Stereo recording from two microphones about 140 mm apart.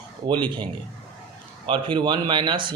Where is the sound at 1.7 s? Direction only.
35° right (ahead or behind).